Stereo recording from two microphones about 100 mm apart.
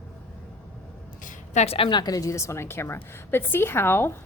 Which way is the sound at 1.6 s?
80° left.